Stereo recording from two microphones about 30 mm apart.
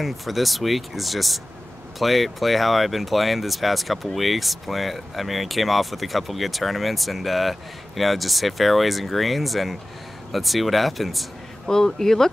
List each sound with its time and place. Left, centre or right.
0.0 s speech: centre
11.6 s speech: centre